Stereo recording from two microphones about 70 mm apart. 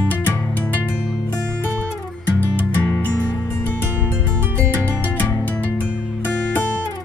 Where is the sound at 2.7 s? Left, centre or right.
Left.